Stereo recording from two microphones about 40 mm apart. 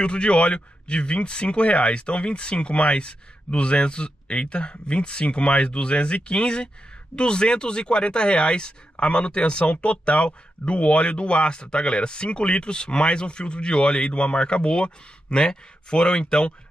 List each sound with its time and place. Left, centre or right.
0.0 s speech: left